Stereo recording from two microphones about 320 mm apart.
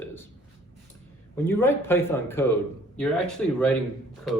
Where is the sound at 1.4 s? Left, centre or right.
Centre.